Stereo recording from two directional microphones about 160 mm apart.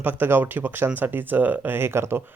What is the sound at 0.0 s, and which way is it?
Speech, 10° right (ahead or behind).